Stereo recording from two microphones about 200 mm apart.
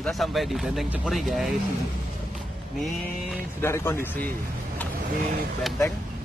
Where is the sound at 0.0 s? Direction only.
Centre (ahead or behind).